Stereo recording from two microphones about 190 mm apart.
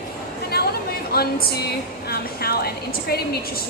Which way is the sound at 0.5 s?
55° left (ahead or behind).